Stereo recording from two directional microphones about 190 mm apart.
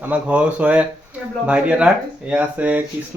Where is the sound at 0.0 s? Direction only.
5° right (ahead or behind).